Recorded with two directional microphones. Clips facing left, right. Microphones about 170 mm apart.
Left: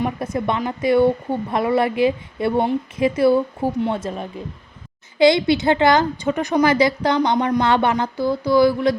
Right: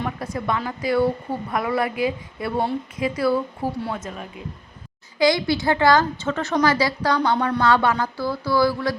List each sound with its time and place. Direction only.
0.0 s speech: 20° left (ahead or behind)